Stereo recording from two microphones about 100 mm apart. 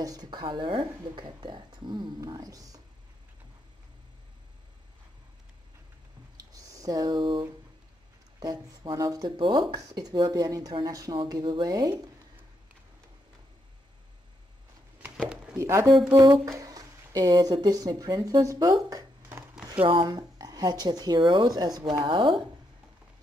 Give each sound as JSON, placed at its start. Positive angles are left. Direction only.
{"t": 0.0, "sound": "speech", "side_deg": -40}
{"t": 6.3, "sound": "a sound", "side_deg": -35}
{"t": 8.4, "sound": "speech", "side_deg": -40}
{"t": 9.4, "sound": "speech", "side_deg": -55}
{"t": 11.1, "sound": "speech", "side_deg": -45}
{"t": 15.5, "sound": "speech", "side_deg": -30}
{"t": 19.7, "sound": "speech", "side_deg": -60}
{"t": 20.1, "sound": "speech", "side_deg": -40}